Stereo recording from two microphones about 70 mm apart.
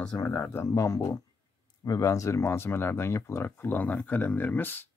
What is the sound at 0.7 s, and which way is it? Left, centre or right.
Speech, left.